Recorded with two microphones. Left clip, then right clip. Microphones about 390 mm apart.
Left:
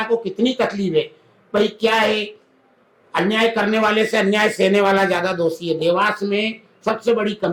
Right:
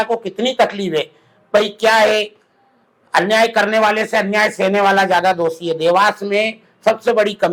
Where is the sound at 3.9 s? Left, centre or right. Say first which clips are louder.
Right 1 dB; right.